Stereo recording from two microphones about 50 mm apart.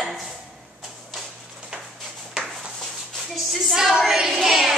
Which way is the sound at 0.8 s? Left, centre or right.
Centre.